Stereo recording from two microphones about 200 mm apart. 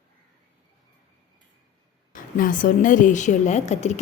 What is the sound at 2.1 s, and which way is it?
A woman's voice, 40° left (ahead or behind).